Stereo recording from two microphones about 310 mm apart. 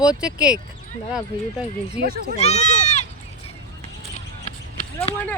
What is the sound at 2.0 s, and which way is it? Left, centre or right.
Speech, right.